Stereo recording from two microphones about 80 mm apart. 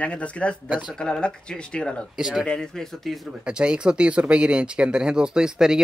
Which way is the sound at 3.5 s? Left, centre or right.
Centre.